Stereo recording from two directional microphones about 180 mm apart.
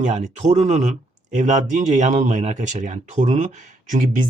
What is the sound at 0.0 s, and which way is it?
Speech, 40° right (ahead or behind).